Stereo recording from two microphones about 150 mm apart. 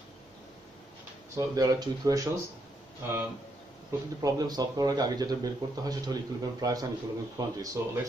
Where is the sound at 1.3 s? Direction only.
25° right (ahead or behind).